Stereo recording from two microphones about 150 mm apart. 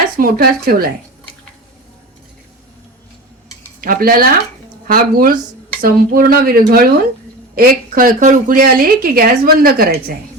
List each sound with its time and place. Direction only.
0.2 s a woman's voice: 80° right
3.8 s a woman's voice: 75° right (ahead or behind)